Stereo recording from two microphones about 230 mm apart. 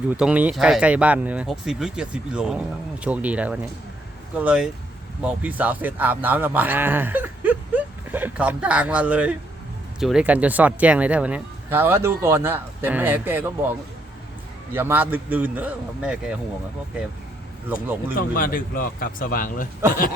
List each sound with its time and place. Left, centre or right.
0.1 s speech: centre
18.2 s speech: left